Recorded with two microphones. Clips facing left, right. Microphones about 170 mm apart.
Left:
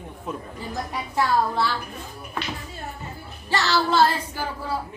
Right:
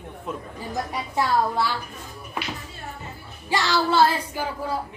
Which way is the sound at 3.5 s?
10° right (ahead or behind).